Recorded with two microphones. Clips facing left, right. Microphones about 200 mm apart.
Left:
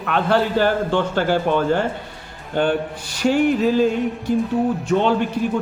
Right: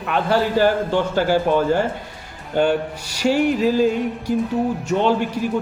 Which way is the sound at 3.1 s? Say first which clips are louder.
Even; 50° left (ahead or behind).